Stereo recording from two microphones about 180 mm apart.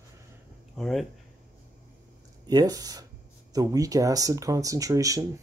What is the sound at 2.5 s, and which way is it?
Speech, 20° right (ahead or behind).